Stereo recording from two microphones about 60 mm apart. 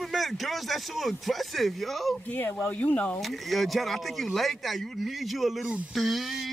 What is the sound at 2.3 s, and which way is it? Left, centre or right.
Speech, left.